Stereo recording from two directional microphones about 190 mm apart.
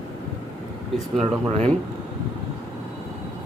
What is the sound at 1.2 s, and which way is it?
Speech, 35° right (ahead or behind).